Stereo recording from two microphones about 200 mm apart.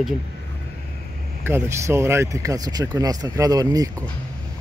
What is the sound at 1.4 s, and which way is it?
Speech, 10° right (ahead or behind).